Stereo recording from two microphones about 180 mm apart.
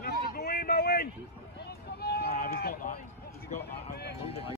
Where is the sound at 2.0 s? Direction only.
65° left (ahead or behind).